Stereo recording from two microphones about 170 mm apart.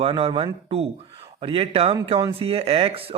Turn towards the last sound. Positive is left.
turn(degrees=-35)  # may be behind; listen again after turning